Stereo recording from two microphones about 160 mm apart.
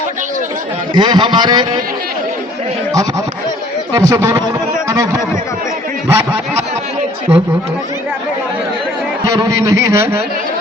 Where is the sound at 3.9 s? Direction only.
20° right (ahead or behind).